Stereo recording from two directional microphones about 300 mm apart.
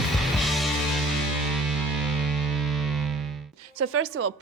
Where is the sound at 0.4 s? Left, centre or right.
Centre.